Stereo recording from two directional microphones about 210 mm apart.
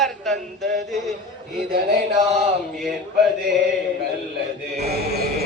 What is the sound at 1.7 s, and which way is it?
Mantra, 45° right (ahead or behind).